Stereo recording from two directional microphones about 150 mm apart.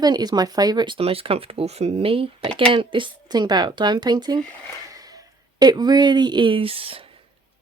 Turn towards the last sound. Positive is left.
turn(degrees=-40)  # may be behind; listen again after turning